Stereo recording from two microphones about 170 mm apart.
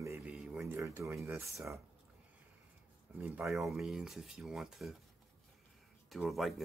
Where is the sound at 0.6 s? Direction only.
15° right (ahead or behind).